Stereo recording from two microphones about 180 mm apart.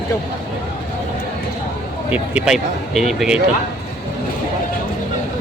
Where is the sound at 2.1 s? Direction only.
5° right (ahead or behind).